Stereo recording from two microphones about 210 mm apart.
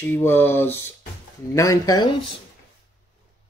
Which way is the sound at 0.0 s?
10° left (ahead or behind).